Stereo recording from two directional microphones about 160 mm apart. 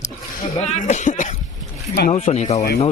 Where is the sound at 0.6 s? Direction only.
45° left (ahead or behind).